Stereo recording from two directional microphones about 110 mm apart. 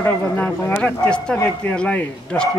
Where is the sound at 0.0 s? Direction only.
15° left (ahead or behind).